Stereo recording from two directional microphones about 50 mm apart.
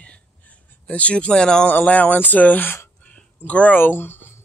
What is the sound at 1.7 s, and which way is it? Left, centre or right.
Speech, left.